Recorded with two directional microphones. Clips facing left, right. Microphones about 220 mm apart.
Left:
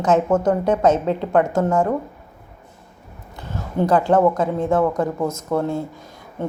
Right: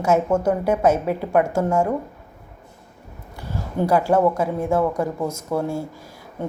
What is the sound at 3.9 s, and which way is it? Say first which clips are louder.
A woman's voice: left 2 dB; 10° right (ahead or behind).